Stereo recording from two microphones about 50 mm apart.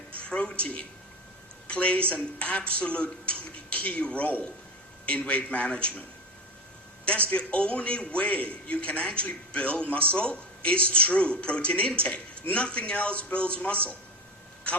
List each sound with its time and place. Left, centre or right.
0.2 s a sound: left
1.6 s a man's voice: left
7.3 s a man's voice: left